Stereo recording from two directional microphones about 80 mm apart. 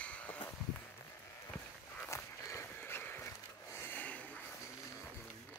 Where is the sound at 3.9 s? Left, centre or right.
Centre.